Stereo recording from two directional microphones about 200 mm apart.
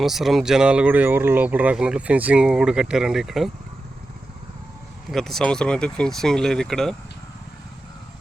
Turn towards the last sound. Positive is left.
turn(degrees=0)  # may be behind; listen again after turning